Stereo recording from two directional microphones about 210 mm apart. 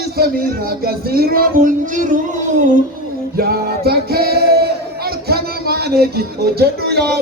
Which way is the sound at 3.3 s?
45° right (ahead or behind).